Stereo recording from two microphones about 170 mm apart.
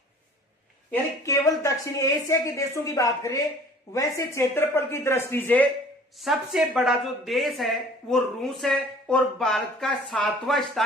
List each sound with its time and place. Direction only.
1.2 s a woman's voice: 20° left (ahead or behind)
6.1 s speech: centre (ahead or behind)